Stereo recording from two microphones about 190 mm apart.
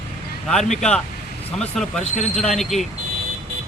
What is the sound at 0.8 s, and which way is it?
Speech, 5° left (ahead or behind).